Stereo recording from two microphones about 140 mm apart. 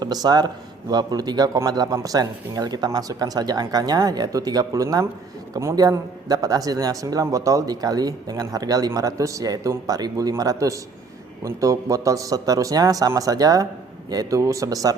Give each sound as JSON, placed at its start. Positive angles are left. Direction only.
{"t": 0.0, "sound": "a man's voice", "side_deg": -30}